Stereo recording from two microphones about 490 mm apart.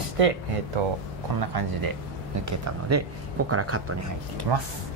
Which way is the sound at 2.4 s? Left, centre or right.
Right.